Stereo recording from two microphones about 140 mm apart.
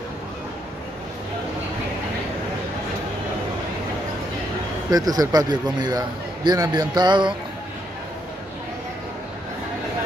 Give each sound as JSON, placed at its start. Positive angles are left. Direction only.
{"t": 4.9, "sound": "a man's voice", "side_deg": -25}